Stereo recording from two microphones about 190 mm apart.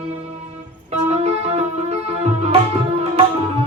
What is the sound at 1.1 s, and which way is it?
Music, 35° right (ahead or behind).